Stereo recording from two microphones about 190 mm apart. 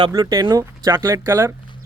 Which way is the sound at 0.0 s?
20° right (ahead or behind).